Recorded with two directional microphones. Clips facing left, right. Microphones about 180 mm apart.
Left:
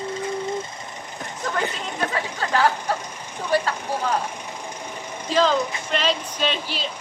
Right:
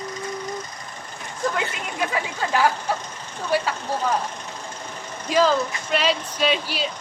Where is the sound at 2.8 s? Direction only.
15° left (ahead or behind).